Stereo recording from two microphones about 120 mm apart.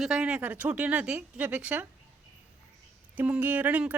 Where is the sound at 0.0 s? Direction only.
5° right (ahead or behind).